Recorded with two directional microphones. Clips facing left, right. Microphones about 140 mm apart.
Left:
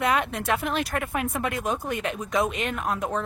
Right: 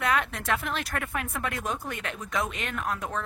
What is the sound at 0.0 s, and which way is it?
A woman's voice, 20° left (ahead or behind).